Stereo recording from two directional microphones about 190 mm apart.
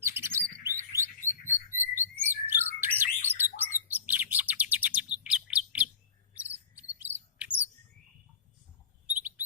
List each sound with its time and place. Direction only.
0.0 s bird: 15° right (ahead or behind)
6.7 s chirp: 10° right (ahead or behind)
9.0 s bird: 10° right (ahead or behind)